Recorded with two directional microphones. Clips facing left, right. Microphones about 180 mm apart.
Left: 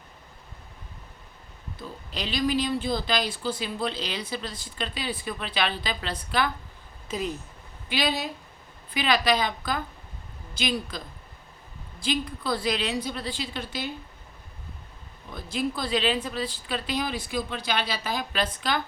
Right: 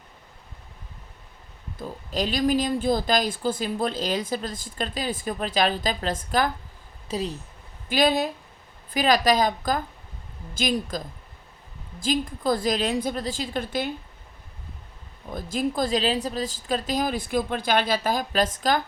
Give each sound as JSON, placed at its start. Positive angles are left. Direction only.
{"t": 1.8, "sound": "speech", "side_deg": -45}
{"t": 7.1, "sound": "speech", "side_deg": -35}
{"t": 7.9, "sound": "speech", "side_deg": -50}
{"t": 12.0, "sound": "speech", "side_deg": -45}
{"t": 15.3, "sound": "speech", "side_deg": -45}